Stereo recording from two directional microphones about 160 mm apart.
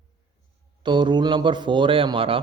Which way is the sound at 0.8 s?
30° right (ahead or behind).